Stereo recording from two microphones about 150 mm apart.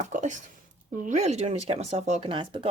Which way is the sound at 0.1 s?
55° right (ahead or behind).